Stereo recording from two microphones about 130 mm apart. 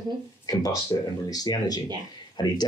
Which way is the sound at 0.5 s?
30° left (ahead or behind).